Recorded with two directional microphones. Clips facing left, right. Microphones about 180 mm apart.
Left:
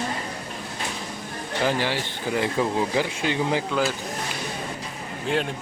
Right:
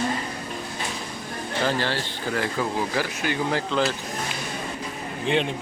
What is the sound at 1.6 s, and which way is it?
Speech, 15° left (ahead or behind).